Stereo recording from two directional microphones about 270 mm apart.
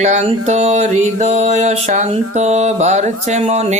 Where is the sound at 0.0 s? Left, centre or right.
Right.